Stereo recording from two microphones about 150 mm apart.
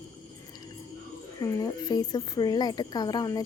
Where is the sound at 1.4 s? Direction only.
25° left (ahead or behind).